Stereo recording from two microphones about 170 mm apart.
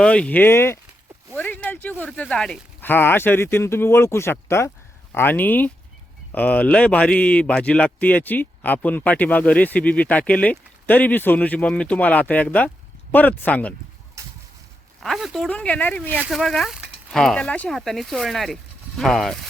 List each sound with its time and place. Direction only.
0.0 s a man's voice: 5° left (ahead or behind)
14.2 s a sound: 20° right (ahead or behind)
15.0 s a man's voice: centre (ahead or behind)